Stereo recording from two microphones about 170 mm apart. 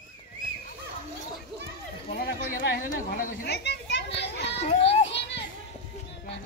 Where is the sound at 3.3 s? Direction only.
70° left (ahead or behind); by 4.6 s 90° left.